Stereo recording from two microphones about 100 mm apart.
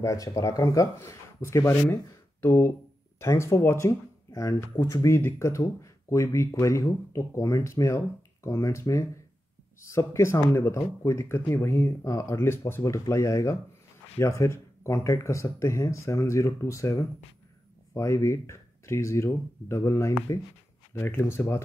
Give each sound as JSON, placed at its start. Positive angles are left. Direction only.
{"t": 0.0, "sound": "speech", "side_deg": 35}